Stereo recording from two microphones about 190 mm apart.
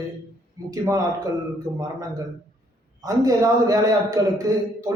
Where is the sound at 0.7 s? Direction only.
20° right (ahead or behind).